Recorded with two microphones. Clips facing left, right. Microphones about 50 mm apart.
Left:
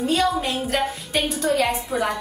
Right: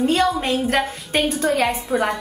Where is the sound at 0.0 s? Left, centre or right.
Right.